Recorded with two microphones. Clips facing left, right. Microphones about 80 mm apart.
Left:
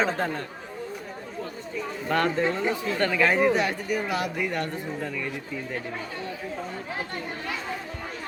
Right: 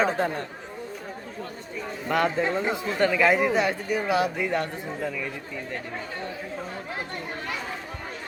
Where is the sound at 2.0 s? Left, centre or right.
Centre.